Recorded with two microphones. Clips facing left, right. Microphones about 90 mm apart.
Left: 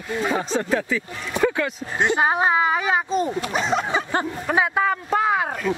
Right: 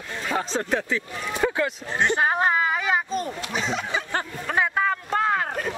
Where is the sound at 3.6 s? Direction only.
45° left (ahead or behind).